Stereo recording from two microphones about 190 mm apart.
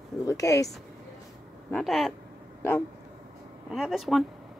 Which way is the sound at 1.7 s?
Centre (ahead or behind).